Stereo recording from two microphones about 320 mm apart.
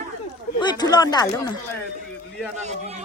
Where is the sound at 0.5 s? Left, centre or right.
Centre.